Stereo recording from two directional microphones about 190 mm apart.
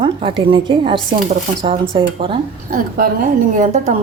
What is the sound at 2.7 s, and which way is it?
A woman's voice, 50° right (ahead or behind).